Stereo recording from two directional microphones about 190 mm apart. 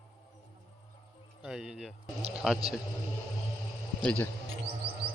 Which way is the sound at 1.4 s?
5° right (ahead or behind).